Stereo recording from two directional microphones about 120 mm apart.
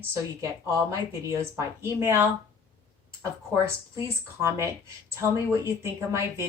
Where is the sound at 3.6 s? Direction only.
20° right (ahead or behind).